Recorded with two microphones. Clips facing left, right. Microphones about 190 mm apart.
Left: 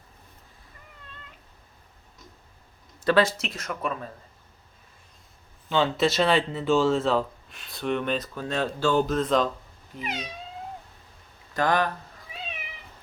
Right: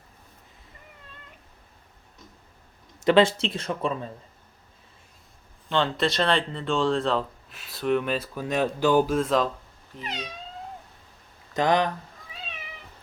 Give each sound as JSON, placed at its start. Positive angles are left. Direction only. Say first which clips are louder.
{"t": 3.0, "sound": "speech", "louder": "right 3 dB", "side_deg": -20}
{"t": 5.6, "sound": "speech", "louder": "left 2 dB", "side_deg": 0}
{"t": 10.0, "sound": "cat", "louder": "left 2 dB", "side_deg": 10}
{"t": 11.5, "sound": "speech", "louder": "right 2 dB", "side_deg": -20}